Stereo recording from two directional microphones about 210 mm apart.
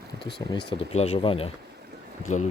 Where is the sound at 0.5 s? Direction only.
25° left (ahead or behind).